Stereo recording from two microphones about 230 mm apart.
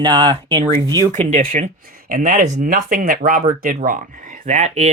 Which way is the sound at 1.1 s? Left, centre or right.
Right.